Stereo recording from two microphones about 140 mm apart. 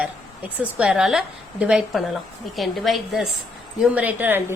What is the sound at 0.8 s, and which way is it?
A woman's voice, 5° right (ahead or behind).